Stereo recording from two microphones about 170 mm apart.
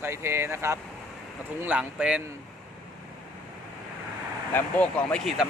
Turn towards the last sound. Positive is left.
turn(degrees=5)  # may be behind; listen again after turning